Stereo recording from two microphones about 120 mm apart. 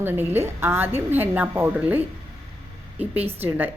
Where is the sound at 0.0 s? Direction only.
20° right (ahead or behind).